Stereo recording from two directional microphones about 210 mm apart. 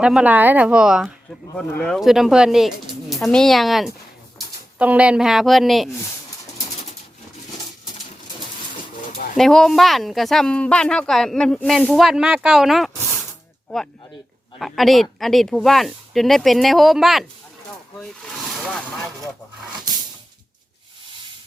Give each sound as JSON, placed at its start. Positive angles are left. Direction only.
{"t": 0.0, "sound": "speech", "side_deg": -5}
{"t": 9.1, "sound": "bird", "side_deg": 45}
{"t": 9.4, "sound": "speech", "side_deg": 0}
{"t": 14.6, "sound": "speech", "side_deg": 0}